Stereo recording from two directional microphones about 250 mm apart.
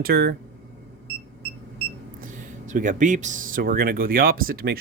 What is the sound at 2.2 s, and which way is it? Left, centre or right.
Speech, right.